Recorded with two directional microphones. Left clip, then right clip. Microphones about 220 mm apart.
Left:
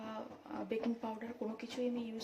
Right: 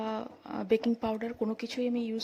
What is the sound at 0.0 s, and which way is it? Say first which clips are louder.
Speech: right 10 dB; 50° right (ahead or behind).